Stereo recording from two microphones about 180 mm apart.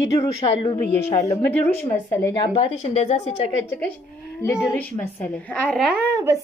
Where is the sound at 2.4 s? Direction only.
35° left (ahead or behind).